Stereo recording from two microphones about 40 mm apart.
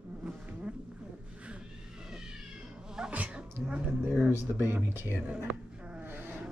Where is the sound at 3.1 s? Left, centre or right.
Right.